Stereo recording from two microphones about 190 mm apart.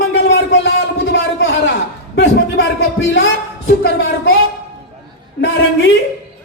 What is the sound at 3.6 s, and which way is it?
Speech, 60° left (ahead or behind).